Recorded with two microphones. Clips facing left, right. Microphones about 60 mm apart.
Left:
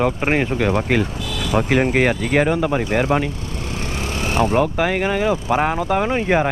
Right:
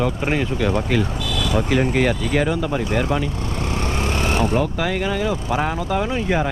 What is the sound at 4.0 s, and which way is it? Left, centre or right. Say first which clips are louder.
Vehicle: right 1 dB; right.